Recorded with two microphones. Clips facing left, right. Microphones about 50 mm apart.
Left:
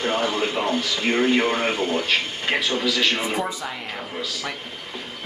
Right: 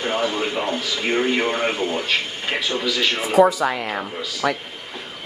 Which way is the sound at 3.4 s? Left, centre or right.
Right.